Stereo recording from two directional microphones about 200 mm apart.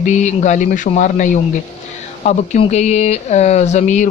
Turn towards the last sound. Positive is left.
turn(degrees=35)  # may be behind; listen again after turning